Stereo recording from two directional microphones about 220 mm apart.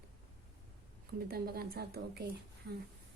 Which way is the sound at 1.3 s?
45° right (ahead or behind).